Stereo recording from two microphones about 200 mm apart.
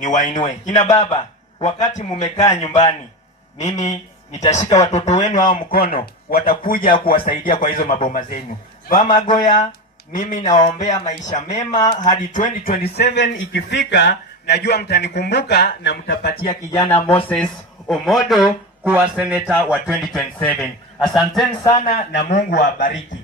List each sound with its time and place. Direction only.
0.0 s a man's voice: 40° left (ahead or behind); by 16.2 s 60° left (ahead or behind)
16.3 s speech: 50° left (ahead or behind)
16.7 s speech: 10° left (ahead or behind)
22.3 s a man's voice: 40° left (ahead or behind)